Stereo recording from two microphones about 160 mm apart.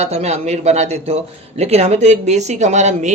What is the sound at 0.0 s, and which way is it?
A man's voice, 45° right (ahead or behind).